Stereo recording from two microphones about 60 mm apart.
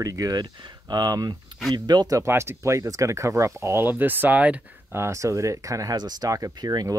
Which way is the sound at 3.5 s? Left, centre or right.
Right.